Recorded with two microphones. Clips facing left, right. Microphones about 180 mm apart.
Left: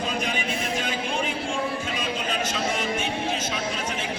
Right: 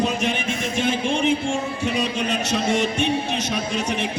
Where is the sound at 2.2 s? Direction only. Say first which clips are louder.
Right 4 dB; 80° right.